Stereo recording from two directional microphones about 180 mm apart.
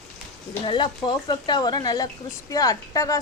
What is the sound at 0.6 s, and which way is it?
Speech, 25° left (ahead or behind).